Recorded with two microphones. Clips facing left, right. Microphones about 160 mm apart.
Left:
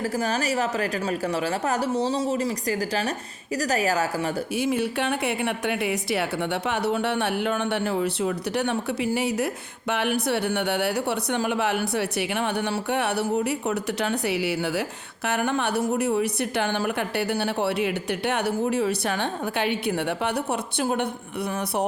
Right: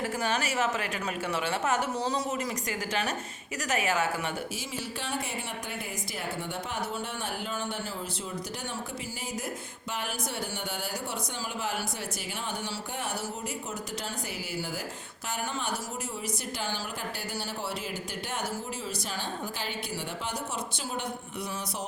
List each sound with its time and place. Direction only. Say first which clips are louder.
0.0 s a woman's voice: left 5 dB; 35° left (ahead or behind)
4.5 s speech: left 13 dB; 60° left (ahead or behind)